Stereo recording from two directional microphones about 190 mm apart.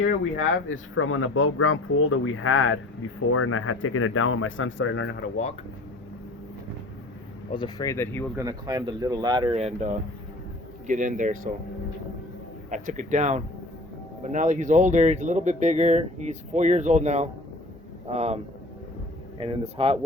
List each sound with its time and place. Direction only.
0.0 s speech: 90° left; by 5.3 s 65° left (ahead or behind)
7.5 s speech: 20° left (ahead or behind)
8.4 s speech: 20° right (ahead or behind); by 11.3 s 40° right (ahead or behind)
12.7 s speech: 40° right (ahead or behind)
19.4 s speech: 30° right (ahead or behind)